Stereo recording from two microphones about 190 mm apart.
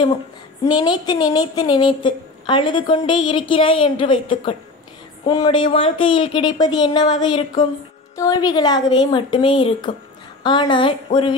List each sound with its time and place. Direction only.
0.7 s a woman's voice: 20° left (ahead or behind)